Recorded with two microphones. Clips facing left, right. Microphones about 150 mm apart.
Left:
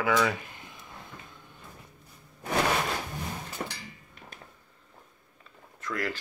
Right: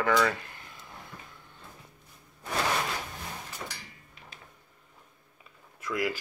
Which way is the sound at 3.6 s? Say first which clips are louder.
Left 6 dB; 45° left (ahead or behind).